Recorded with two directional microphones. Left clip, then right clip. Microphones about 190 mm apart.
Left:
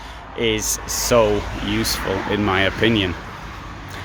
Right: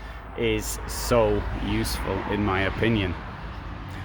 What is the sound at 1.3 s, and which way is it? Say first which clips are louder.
Speech: left 5 dB; 65° left (ahead or behind).